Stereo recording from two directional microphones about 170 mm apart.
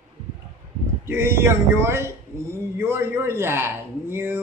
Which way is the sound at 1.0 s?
15° right (ahead or behind).